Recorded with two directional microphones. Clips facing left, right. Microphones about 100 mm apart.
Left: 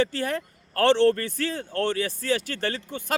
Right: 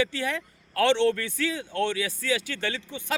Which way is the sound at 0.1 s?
45° left (ahead or behind).